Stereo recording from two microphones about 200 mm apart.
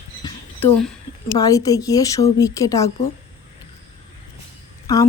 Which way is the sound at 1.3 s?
15° left (ahead or behind).